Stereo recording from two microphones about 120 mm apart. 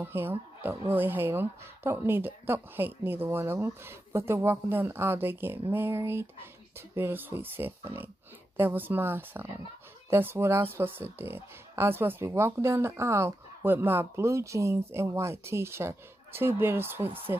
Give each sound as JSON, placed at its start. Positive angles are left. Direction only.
{"t": 0.0, "sound": "speech", "side_deg": -15}